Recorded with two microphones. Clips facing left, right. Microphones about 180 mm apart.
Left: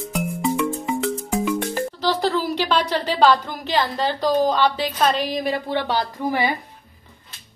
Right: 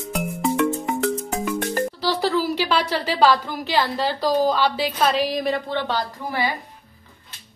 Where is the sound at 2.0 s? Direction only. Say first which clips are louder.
Left 1 dB; 10° right (ahead or behind).